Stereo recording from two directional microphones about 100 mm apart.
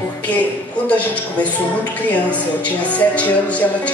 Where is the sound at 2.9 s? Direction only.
15° left (ahead or behind).